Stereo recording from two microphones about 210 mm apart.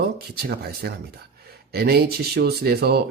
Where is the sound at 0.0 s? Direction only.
50° right (ahead or behind).